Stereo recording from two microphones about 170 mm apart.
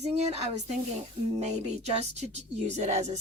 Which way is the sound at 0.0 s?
40° right (ahead or behind).